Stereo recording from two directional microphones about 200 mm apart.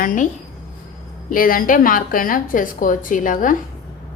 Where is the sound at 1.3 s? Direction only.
45° left (ahead or behind).